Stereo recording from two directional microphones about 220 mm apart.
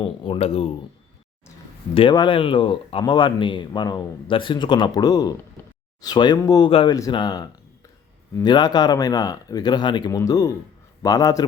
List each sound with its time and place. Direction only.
0.0 s speech: 25° left (ahead or behind)
2.0 s speech: 20° left (ahead or behind)